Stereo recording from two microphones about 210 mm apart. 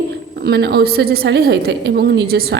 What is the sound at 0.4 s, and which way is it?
A woman's voice, 50° right (ahead or behind).